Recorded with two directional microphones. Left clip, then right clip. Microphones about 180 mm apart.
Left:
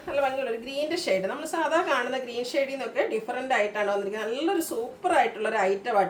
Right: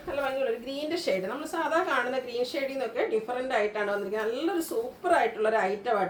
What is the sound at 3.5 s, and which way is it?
A woman's voice, 15° left (ahead or behind).